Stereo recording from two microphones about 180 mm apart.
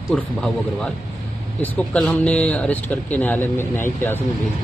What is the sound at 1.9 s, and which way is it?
Speech, 5° left (ahead or behind).